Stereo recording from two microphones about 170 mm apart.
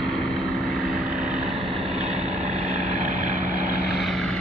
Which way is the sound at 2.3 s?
40° right (ahead or behind).